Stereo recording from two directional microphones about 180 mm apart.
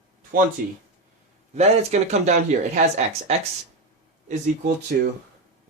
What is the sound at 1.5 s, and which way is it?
Speech, 40° right (ahead or behind).